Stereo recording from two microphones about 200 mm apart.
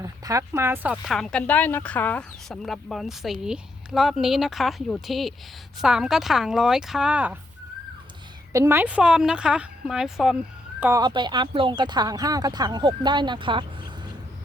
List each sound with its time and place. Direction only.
0.0 s speech: 15° right (ahead or behind)
8.5 s speech: 10° right (ahead or behind)
10.8 s speech: 15° right (ahead or behind)